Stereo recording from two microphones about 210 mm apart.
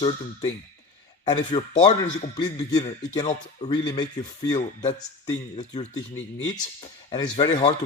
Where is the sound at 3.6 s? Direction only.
20° left (ahead or behind).